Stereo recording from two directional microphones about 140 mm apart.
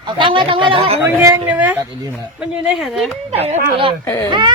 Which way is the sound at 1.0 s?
20° right (ahead or behind).